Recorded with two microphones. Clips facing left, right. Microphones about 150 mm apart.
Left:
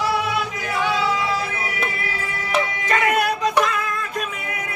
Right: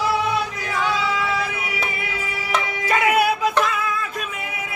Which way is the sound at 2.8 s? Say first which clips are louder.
Right 3 dB; 5° right (ahead or behind).